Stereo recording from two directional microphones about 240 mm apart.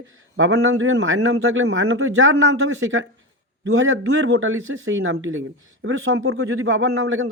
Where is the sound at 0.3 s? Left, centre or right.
Right.